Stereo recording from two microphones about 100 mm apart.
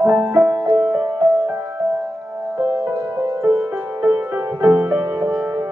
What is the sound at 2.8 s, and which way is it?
Music, 30° right (ahead or behind).